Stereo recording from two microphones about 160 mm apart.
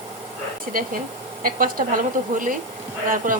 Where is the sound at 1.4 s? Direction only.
65° right (ahead or behind).